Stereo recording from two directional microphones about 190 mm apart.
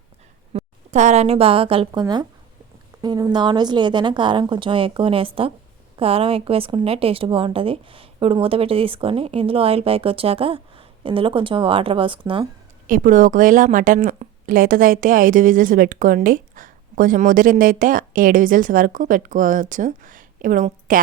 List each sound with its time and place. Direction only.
0.5 s a woman's voice: 35° right (ahead or behind)
12.9 s a woman's voice: 45° right (ahead or behind)